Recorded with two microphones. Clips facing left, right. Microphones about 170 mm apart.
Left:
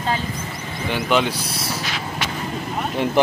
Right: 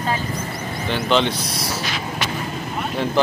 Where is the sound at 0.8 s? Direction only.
10° left (ahead or behind).